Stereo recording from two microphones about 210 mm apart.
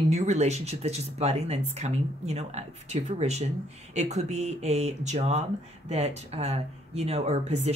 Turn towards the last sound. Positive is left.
turn(degrees=-30)  # may be behind; listen again after turning